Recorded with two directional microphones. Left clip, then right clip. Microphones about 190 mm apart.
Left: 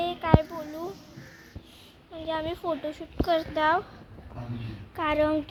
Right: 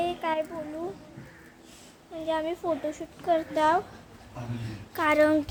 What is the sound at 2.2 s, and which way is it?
A woman's voice, 5° right (ahead or behind).